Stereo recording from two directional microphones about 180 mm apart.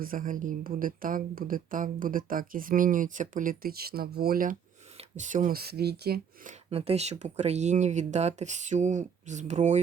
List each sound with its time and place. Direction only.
0.0 s speech: 50° right (ahead or behind)
5.1 s speech: 40° right (ahead or behind); by 6.5 s 60° right (ahead or behind)
6.7 s speech: 35° right (ahead or behind)